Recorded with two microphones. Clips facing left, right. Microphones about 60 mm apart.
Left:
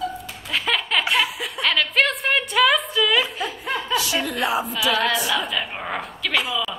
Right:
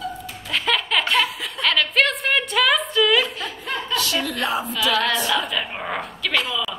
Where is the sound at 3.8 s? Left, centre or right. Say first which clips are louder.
Even; centre.